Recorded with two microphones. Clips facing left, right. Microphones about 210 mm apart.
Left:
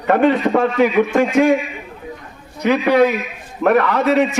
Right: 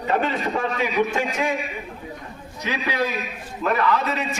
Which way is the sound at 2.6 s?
60° left (ahead or behind).